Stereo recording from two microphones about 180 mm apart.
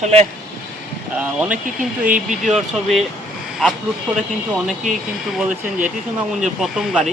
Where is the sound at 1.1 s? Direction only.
5° right (ahead or behind).